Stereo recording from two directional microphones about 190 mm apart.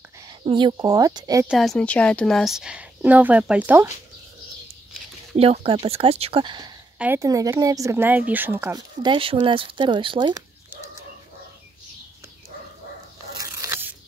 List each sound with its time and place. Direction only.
0.2 s speech: 25° right (ahead or behind)
1.5 s a woman's voice: centre (ahead or behind)
5.3 s speech: 30° right (ahead or behind)
7.0 s a woman's voice: 15° right (ahead or behind)
9.0 s speech: 25° right (ahead or behind)
13.4 s a sound: 15° right (ahead or behind)